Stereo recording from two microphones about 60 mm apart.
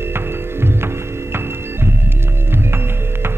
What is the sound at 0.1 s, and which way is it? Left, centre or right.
Music, right.